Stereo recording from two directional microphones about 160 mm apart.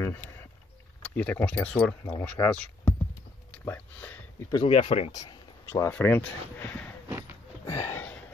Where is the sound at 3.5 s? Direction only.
10° left (ahead or behind).